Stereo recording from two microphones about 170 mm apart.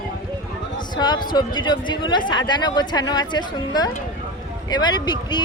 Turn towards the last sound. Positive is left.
turn(degrees=25)  # may be behind; listen again after turning